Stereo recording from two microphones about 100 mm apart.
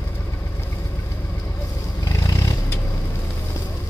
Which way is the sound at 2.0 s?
35° left (ahead or behind).